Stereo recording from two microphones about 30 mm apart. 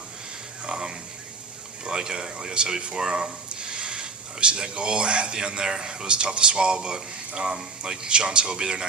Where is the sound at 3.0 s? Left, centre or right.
Right.